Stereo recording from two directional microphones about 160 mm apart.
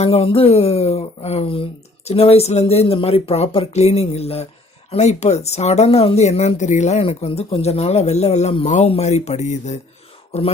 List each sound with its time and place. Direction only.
0.0 s speech: 40° left (ahead or behind)